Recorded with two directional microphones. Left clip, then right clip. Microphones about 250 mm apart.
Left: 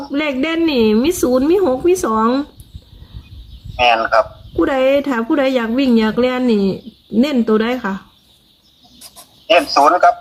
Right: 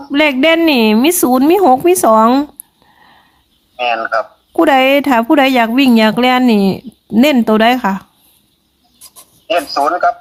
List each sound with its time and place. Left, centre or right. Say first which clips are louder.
0.1 s speech: right 9 dB; right
3.8 s speech: left 3 dB; centre
4.6 s speech: right 5 dB; right
9.5 s speech: left 3 dB; centre